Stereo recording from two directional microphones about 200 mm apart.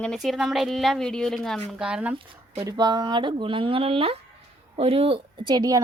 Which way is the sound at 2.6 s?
20° right (ahead or behind).